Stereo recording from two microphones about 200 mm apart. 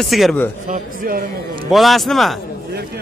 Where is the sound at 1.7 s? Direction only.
Centre (ahead or behind).